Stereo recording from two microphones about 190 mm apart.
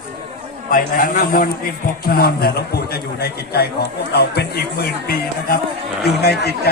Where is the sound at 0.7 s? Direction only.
45° left (ahead or behind).